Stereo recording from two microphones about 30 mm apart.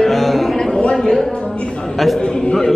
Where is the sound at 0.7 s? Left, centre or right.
Left.